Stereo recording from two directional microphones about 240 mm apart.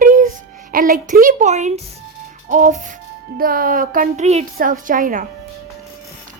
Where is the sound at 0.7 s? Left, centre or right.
Right.